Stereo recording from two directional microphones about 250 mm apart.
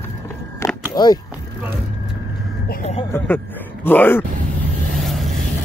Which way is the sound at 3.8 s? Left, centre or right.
Centre.